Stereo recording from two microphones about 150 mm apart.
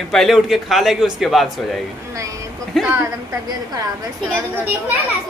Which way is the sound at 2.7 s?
Centre (ahead or behind).